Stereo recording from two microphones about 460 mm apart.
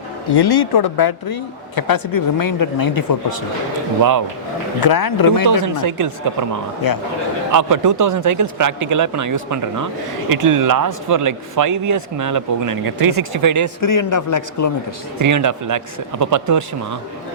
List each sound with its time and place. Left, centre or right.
0.3 s speech: left
4.8 s speech: left
5.5 s speech: right
6.8 s speech: left
7.5 s speech: right
13.8 s speech: left
15.2 s speech: right